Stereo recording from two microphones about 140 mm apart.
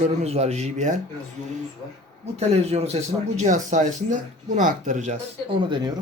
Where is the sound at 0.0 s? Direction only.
50° right (ahead or behind).